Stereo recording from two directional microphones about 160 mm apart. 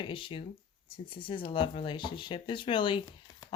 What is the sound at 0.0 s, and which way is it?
Speech, 30° left (ahead or behind).